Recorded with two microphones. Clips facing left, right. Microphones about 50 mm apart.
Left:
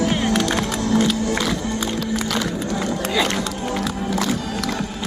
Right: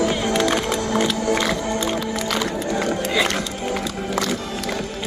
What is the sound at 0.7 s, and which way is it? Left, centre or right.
Music, right.